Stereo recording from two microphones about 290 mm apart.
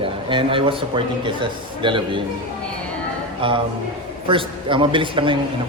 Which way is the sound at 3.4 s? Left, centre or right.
Centre.